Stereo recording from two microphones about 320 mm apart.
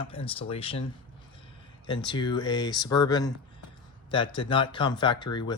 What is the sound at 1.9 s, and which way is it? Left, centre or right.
Speech, centre.